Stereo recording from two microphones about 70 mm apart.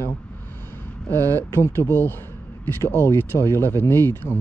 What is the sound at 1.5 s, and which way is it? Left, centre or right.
Speech, left.